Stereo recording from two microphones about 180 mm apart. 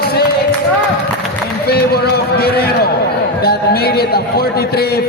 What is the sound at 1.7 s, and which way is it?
A man's voice, 60° left (ahead or behind).